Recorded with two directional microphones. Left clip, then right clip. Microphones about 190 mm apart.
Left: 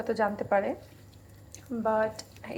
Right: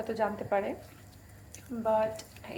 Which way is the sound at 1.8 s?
20° left (ahead or behind).